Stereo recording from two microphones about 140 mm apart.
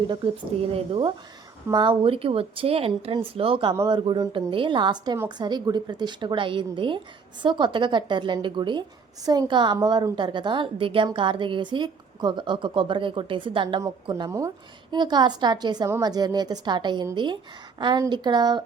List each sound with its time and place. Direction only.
0.6 s a woman's voice: 40° right (ahead or behind)
13.8 s a woman's voice: 25° right (ahead or behind)